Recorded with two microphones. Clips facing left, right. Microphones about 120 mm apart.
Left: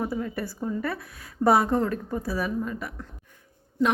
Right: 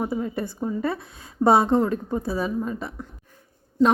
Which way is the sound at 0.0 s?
20° right (ahead or behind).